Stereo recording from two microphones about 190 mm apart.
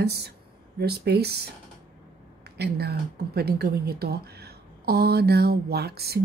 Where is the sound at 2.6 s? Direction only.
60° right (ahead or behind).